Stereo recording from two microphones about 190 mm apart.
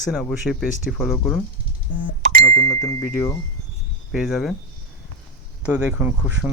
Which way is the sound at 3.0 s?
5° right (ahead or behind).